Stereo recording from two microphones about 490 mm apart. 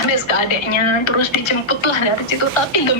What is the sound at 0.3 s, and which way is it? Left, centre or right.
A woman's voice, left.